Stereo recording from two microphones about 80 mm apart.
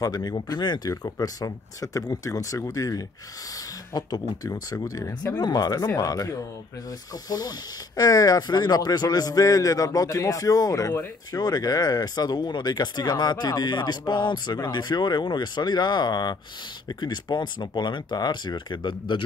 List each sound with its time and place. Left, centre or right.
0.0 s speech: left
1.2 s speech: left